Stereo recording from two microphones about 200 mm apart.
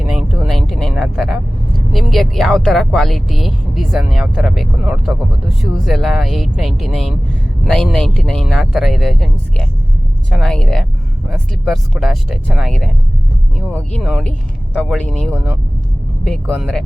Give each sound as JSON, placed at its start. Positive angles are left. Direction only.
{"t": 0.0, "sound": "vehicle", "side_deg": -5}
{"t": 1.9, "sound": "speech", "side_deg": 0}
{"t": 15.3, "sound": "speech", "side_deg": -10}
{"t": 16.2, "sound": "speech", "side_deg": 5}